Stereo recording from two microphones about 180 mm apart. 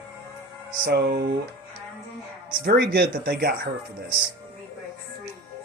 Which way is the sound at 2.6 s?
65° right (ahead or behind).